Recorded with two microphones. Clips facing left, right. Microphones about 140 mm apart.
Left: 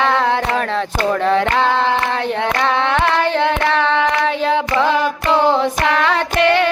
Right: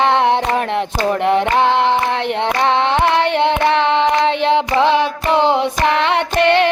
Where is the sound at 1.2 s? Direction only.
20° right (ahead or behind).